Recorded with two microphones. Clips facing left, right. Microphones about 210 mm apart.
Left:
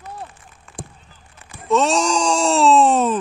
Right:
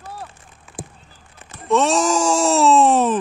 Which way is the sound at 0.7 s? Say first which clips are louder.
Right 1 dB; 5° right (ahead or behind).